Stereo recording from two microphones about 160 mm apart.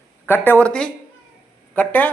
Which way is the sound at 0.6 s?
5° left (ahead or behind).